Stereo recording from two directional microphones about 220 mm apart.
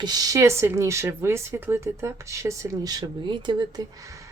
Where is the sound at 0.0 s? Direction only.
15° right (ahead or behind).